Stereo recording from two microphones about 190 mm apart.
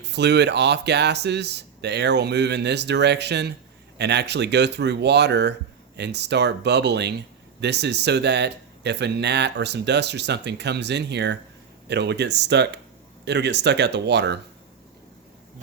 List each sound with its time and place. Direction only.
0.0 s speech: 65° right (ahead or behind)